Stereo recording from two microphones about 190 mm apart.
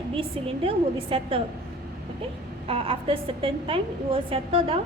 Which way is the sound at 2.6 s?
30° right (ahead or behind).